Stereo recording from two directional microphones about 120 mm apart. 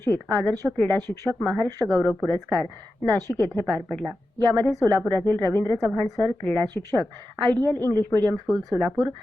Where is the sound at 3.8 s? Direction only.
5° left (ahead or behind).